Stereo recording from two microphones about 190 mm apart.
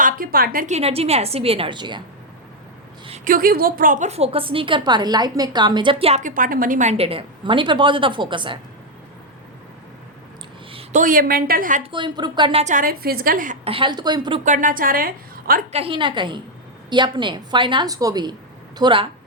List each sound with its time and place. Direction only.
0.0 s a woman's voice: 50° right (ahead or behind)
0.8 s a woman's voice: 30° right (ahead or behind)
3.2 s a woman's voice: 50° right (ahead or behind); by 8.5 s 25° right (ahead or behind)
10.7 s a sound: 30° right (ahead or behind)
11.0 s a woman's voice: 45° right (ahead or behind)
11.8 s a woman's voice: 25° right (ahead or behind); by 13.6 s 45° right (ahead or behind)
13.7 s a woman's voice: 25° right (ahead or behind)
14.4 s a woman's voice: 45° right (ahead or behind)
15.7 s a woman's voice: 30° right (ahead or behind)